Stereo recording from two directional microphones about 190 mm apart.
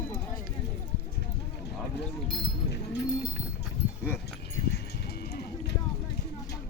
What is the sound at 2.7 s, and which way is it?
Speech, 60° left (ahead or behind).